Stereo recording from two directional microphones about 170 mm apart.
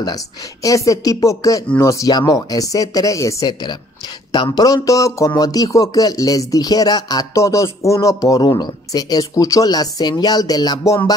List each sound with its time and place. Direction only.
0.0 s speech: 20° left (ahead or behind)